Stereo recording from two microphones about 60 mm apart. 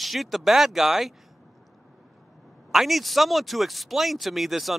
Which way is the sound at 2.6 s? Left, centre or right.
Centre.